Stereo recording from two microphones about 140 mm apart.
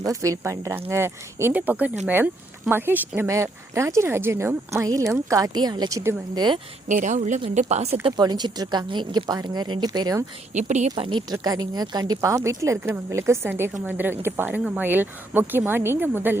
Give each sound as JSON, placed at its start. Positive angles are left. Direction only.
{"t": 0.0, "sound": "speech", "side_deg": -25}
{"t": 6.0, "sound": "speech", "side_deg": -20}
{"t": 6.8, "sound": "speech", "side_deg": -60}
{"t": 8.0, "sound": "speech", "side_deg": -30}
{"t": 10.5, "sound": "speech", "side_deg": -55}
{"t": 10.9, "sound": "speech", "side_deg": -35}